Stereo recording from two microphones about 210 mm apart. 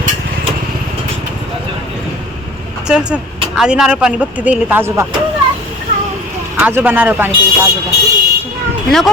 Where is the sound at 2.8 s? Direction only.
5° right (ahead or behind).